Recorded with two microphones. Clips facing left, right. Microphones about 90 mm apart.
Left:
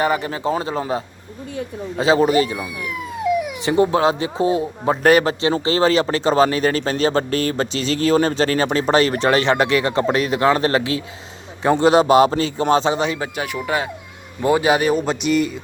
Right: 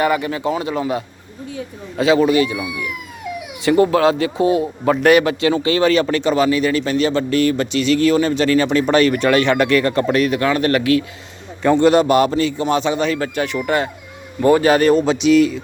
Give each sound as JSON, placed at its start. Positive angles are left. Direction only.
{"t": 0.0, "sound": "speech", "side_deg": 30}
{"t": 3.6, "sound": "a man's voice", "side_deg": 25}